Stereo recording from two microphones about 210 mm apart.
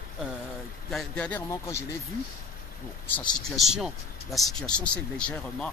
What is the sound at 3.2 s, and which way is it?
Speech, centre (ahead or behind).